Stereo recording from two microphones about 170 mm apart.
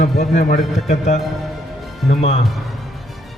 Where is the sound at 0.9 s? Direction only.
40° left (ahead or behind).